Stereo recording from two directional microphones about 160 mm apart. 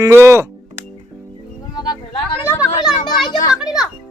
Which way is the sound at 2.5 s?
20° left (ahead or behind).